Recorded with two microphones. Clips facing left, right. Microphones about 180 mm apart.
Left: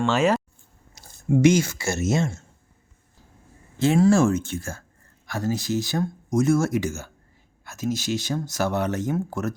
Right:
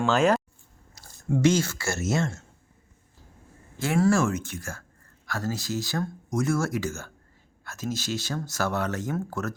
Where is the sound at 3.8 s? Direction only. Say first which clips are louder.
Left 5 dB; 20° left (ahead or behind).